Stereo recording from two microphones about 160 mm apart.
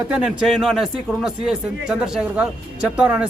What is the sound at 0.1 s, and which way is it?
A man's voice, 5° right (ahead or behind).